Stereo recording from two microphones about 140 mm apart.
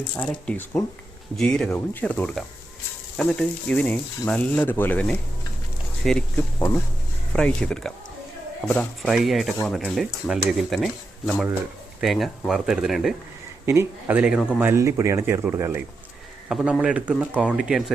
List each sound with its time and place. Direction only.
0.2 s speech: 10° left (ahead or behind)
11.9 s speech: centre (ahead or behind)
13.7 s speech: 15° right (ahead or behind)
16.5 s speech: 5° right (ahead or behind)